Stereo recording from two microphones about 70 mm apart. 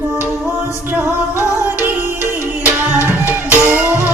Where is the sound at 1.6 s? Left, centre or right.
Right.